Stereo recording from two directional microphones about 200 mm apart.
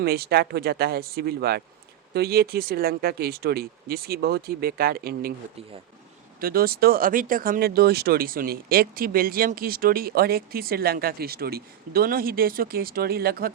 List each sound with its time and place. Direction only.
0.0 s speech: 50° right (ahead or behind)
6.4 s speech: 50° right (ahead or behind)